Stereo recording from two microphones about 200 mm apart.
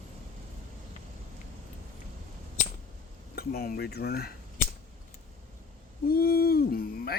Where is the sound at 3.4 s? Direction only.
50° left (ahead or behind).